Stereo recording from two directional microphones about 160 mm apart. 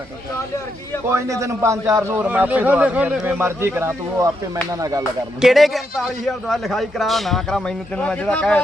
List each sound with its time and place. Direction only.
1.1 s a man's voice: 20° right (ahead or behind)
5.4 s a man's voice: centre (ahead or behind)